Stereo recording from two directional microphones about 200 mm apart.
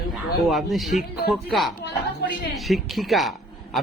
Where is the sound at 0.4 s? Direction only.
Centre (ahead or behind).